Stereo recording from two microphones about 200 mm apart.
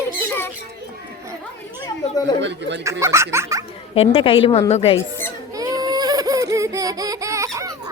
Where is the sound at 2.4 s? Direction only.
60° right (ahead or behind).